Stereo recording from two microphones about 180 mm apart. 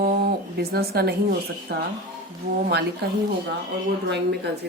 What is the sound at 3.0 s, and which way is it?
A woman's voice, 65° right (ahead or behind).